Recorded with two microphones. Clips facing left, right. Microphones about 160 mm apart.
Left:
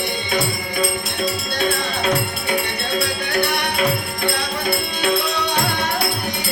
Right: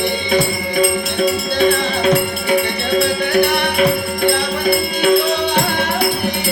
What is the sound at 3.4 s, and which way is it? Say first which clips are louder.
Music: right 5 dB; 60° right (ahead or behind).